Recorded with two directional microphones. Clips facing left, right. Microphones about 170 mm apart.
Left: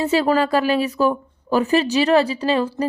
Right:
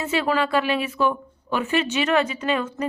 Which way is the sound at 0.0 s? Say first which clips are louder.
Left 5 dB; 35° left (ahead or behind).